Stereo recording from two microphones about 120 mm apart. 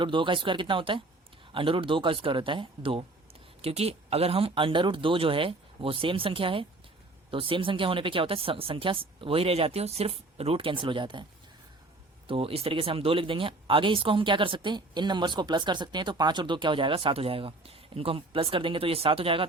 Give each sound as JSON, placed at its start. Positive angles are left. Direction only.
{"t": 0.0, "sound": "speech", "side_deg": -45}
{"t": 3.6, "sound": "speech", "side_deg": -60}
{"t": 12.3, "sound": "speech", "side_deg": -50}